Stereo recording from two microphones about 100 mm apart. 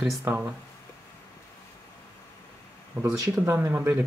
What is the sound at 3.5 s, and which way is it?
Speech, 20° right (ahead or behind).